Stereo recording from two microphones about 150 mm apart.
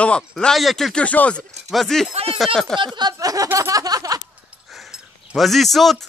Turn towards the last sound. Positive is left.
turn(degrees=0)  # may be behind; listen again after turning